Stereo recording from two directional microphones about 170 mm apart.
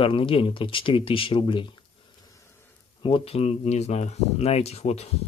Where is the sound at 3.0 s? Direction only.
35° left (ahead or behind).